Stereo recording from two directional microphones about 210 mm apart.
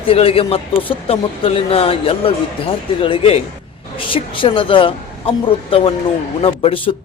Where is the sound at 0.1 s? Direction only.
25° left (ahead or behind).